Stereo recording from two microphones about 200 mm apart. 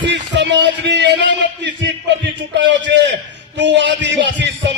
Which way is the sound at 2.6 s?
60° right (ahead or behind).